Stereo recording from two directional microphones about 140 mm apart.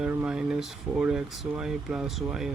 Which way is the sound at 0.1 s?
10° right (ahead or behind).